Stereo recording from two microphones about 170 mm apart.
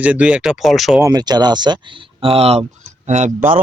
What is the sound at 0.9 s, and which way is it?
Speech, 20° right (ahead or behind).